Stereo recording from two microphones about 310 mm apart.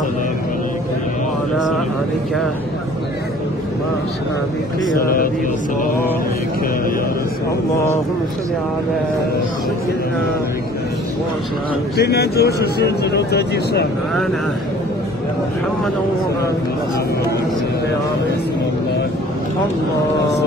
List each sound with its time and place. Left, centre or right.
4.8 s speech: left
12.0 s speech: left